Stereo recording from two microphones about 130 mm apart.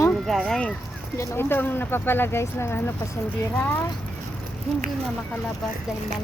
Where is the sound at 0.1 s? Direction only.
5° left (ahead or behind).